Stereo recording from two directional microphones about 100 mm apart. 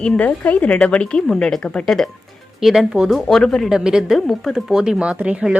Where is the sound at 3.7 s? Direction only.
5° right (ahead or behind).